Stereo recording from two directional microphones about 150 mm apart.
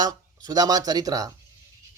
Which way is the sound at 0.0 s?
25° right (ahead or behind).